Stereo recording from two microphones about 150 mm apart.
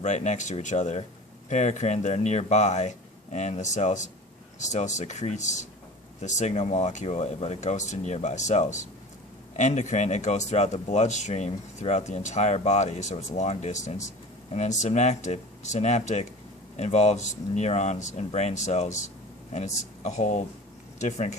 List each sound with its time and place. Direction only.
0.0 s speech: 55° left (ahead or behind)
20.0 s speech: 50° left (ahead or behind)